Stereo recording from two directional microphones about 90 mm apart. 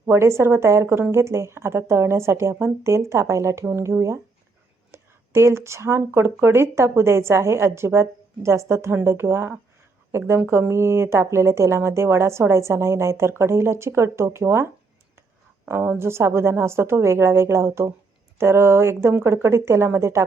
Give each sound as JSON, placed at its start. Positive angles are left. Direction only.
{"t": 0.0, "sound": "speech", "side_deg": -30}